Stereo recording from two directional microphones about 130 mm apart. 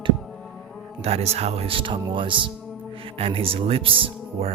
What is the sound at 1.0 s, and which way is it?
Speech, 50° right (ahead or behind).